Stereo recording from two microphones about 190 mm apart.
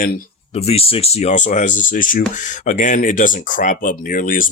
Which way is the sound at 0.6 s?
30° left (ahead or behind).